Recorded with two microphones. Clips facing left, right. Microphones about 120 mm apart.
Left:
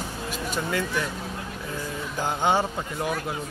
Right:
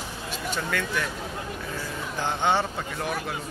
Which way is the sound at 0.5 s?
10° left (ahead or behind).